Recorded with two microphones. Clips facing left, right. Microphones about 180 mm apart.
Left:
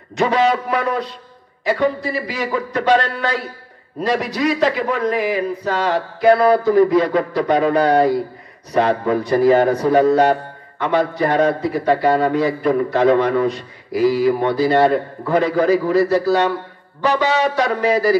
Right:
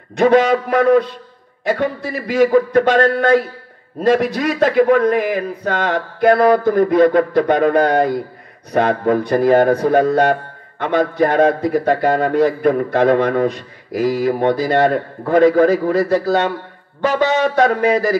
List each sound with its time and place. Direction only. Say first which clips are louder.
0.1 s a man's voice: right 4 dB; 55° right (ahead or behind)